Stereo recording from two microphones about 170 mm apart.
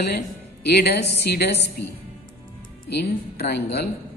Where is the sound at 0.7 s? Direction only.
70° left (ahead or behind).